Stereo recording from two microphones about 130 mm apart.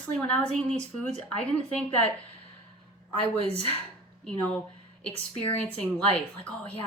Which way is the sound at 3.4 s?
55° right (ahead or behind).